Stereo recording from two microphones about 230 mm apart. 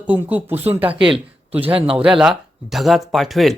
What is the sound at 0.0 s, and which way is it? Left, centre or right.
Speech, centre.